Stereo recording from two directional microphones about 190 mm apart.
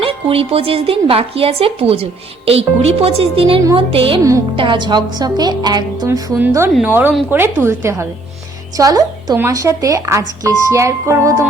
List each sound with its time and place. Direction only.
0.0 s a woman's voice: 30° right (ahead or behind); by 11.4 s 15° right (ahead or behind)